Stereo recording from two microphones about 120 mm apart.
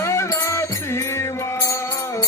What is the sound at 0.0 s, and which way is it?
Music, 25° left (ahead or behind).